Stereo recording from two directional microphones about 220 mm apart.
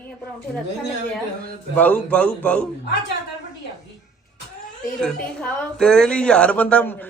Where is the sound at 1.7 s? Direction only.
5° left (ahead or behind).